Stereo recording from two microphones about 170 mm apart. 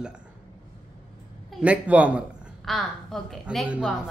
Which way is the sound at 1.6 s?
10° right (ahead or behind).